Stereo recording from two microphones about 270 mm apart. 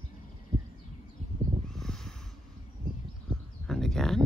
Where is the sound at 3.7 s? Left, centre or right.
Centre.